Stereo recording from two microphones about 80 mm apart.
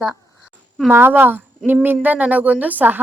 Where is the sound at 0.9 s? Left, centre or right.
Right.